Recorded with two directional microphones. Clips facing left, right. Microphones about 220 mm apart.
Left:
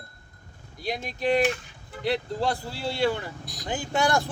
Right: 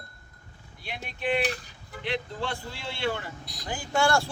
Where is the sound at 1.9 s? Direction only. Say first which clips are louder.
Left 5 dB; 35° left (ahead or behind).